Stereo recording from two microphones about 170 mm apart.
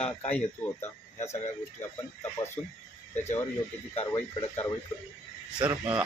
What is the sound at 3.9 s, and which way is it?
Speech, 35° left (ahead or behind).